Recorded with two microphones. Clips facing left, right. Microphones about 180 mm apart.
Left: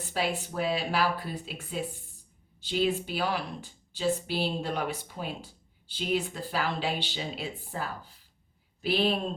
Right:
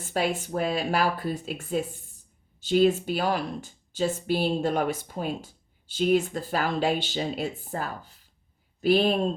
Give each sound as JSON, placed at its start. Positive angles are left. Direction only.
{"t": 0.0, "sound": "a woman's voice", "side_deg": -45}